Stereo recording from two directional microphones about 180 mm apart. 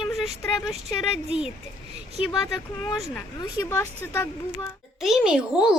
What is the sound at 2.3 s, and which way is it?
Speech, 20° left (ahead or behind).